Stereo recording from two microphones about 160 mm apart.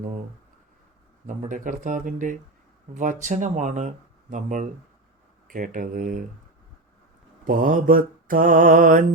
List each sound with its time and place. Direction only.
1.3 s mantra: 55° right (ahead or behind)
2.9 s speech: 50° right (ahead or behind)
5.5 s mantra: 55° right (ahead or behind)
7.4 s mantra: 60° right (ahead or behind)